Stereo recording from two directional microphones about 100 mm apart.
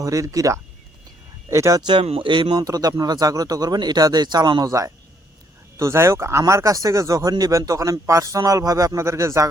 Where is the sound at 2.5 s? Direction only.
40° right (ahead or behind).